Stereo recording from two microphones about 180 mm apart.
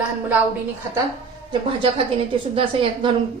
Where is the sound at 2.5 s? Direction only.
30° right (ahead or behind).